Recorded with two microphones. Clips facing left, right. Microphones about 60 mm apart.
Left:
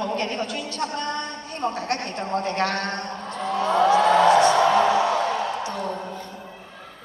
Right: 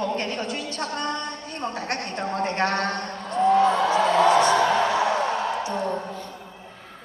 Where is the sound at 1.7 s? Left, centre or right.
Right.